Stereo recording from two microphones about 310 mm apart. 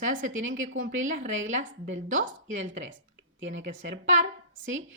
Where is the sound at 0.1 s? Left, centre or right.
Right.